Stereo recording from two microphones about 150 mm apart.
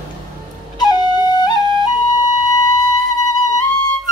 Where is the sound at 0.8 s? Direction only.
30° left (ahead or behind).